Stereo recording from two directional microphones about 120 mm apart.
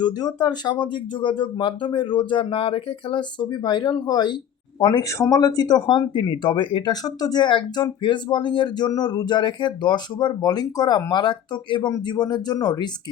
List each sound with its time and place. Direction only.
0.0 s speech: 35° left (ahead or behind)